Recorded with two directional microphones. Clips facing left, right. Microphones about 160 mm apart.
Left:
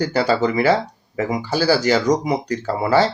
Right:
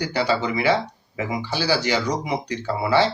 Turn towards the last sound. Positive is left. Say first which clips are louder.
# left 3 dB
turn(degrees=45)  # may be behind; listen again after turning